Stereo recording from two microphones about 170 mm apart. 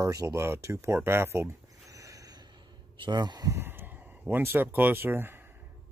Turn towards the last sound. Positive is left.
turn(degrees=-10)  # may be behind; listen again after turning